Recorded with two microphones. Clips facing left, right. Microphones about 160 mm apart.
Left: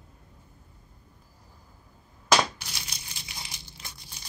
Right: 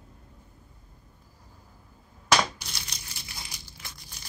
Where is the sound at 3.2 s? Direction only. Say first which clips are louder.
Even; 20° left (ahead or behind).